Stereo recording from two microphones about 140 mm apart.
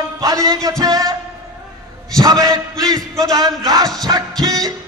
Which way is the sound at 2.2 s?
25° right (ahead or behind).